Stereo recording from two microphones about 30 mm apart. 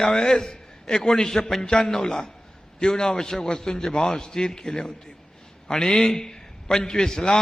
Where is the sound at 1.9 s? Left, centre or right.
Centre.